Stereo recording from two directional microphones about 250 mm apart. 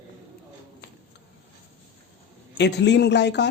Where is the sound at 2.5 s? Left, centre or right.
Left.